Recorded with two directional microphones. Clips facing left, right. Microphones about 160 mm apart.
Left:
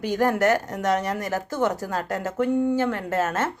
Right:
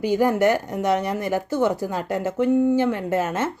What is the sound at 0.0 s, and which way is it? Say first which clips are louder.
Speech: right 3 dB; 10° right (ahead or behind).